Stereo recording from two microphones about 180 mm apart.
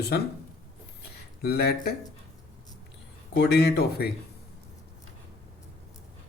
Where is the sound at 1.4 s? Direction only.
60° left (ahead or behind).